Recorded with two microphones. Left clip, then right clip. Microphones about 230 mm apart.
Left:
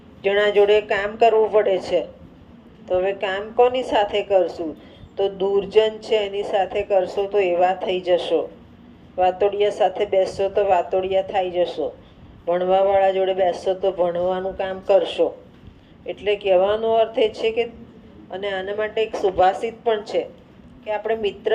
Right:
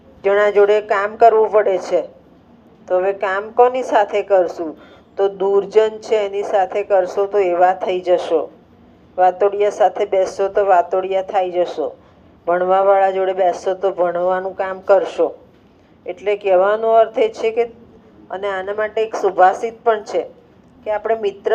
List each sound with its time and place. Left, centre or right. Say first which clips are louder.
0.2 s speech: right 4 dB; right
0.8 s speech: right 4 dB; centre
1.2 s speech: right 4 dB; right
6.7 s speech: right 4 dB; centre
7.2 s speech: right 4 dB; right
9.1 s speech: right 4 dB; right